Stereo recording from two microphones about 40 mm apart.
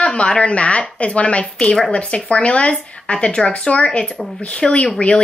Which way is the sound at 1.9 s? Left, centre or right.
Left.